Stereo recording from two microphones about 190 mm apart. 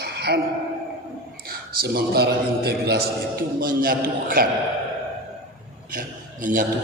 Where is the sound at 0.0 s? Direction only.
60° right (ahead or behind).